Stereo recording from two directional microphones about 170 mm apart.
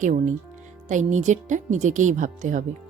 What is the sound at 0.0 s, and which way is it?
Speech, 45° right (ahead or behind).